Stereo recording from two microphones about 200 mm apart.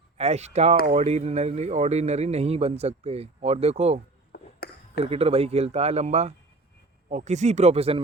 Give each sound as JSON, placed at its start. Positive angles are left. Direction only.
{"t": 0.2, "sound": "speech", "side_deg": -35}
{"t": 4.3, "sound": "a sound", "side_deg": 50}
{"t": 5.0, "sound": "speech", "side_deg": -30}